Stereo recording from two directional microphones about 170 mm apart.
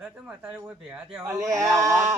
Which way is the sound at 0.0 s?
5° right (ahead or behind).